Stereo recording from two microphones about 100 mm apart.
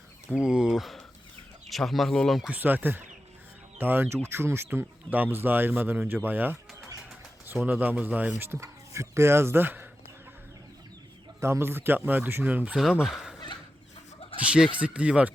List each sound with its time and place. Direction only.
0.3 s speech: 10° right (ahead or behind)
2.5 s speech: 20° right (ahead or behind)
7.6 s speech: 15° right (ahead or behind)
8.4 s speech: 25° right (ahead or behind)
11.3 s speech: 30° right (ahead or behind)
12.7 s speech: 5° right (ahead or behind)
14.4 s speech: 10° right (ahead or behind)